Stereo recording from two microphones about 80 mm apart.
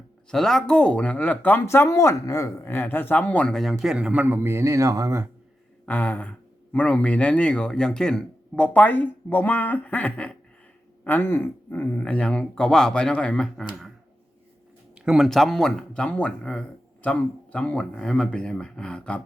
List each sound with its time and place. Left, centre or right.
0.3 s speech: centre; by 1.6 s left
1.6 s speech: left; by 3.5 s centre
3.5 s a man's voice: centre
4.3 s speech: right
5.8 s a sound: centre
6.7 s speech: centre
11.8 s speech: centre
14.9 s a sound: centre
15.3 s speech: centre